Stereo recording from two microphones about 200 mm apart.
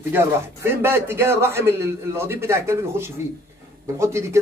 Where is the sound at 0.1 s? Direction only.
10° right (ahead or behind).